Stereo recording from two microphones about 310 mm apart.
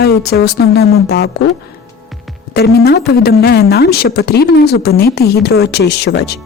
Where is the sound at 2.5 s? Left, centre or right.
Left.